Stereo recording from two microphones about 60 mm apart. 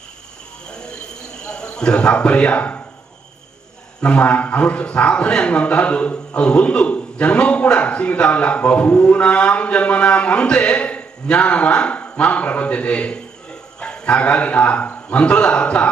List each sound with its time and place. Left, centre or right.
1.5 s speech: centre
4.0 s a man's voice: left